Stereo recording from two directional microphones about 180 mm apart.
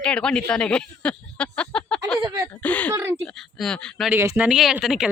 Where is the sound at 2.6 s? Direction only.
10° left (ahead or behind).